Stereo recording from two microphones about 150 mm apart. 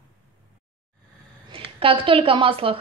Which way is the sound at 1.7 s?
35° right (ahead or behind).